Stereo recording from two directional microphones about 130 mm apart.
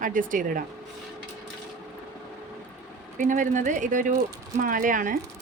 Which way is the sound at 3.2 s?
80° right.